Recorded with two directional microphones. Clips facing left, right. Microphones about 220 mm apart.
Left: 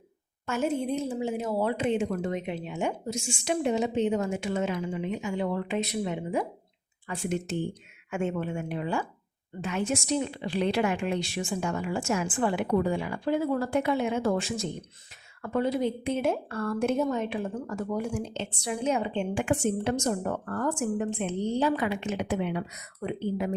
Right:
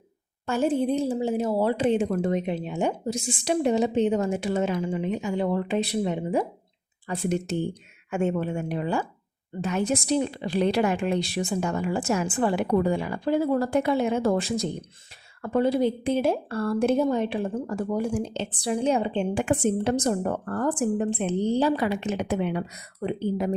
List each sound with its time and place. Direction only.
0.4 s a woman's voice: 35° right (ahead or behind)